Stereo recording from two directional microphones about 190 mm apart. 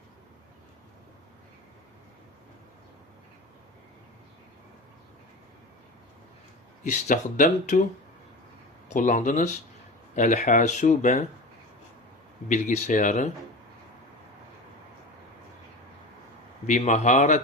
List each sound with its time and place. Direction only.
6.8 s speech: 40° left (ahead or behind)
8.9 s speech: 40° left (ahead or behind)
12.5 s speech: 40° left (ahead or behind)
16.6 s speech: 40° left (ahead or behind)